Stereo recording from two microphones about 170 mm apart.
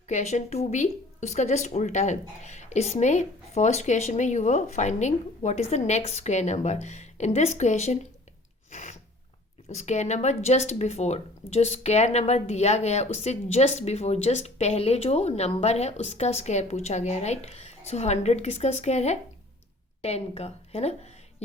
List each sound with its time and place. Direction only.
0.1 s speech: 45° left (ahead or behind)
8.7 s a sound: 45° left (ahead or behind)
9.6 s a woman's voice: 40° left (ahead or behind)